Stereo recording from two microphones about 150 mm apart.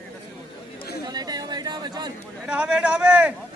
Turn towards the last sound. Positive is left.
turn(degrees=-10)  # may be behind; listen again after turning